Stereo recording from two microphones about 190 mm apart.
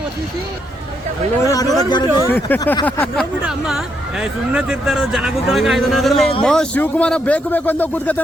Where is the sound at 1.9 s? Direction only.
25° left (ahead or behind).